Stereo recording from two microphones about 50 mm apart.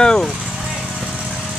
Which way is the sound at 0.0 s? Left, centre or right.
Centre.